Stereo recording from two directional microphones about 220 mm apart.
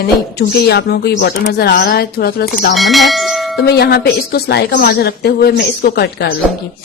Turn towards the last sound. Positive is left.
turn(degrees=45)  # may be behind; listen again after turning